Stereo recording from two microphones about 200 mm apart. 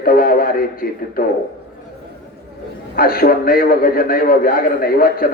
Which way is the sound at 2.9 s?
45° left (ahead or behind).